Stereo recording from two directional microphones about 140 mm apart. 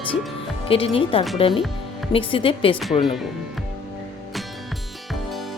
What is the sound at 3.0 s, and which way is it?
Speech, centre (ahead or behind).